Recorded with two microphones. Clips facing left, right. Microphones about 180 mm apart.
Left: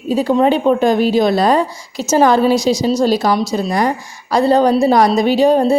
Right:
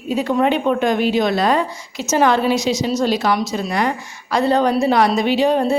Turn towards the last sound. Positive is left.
turn(degrees=35)  # may be behind; listen again after turning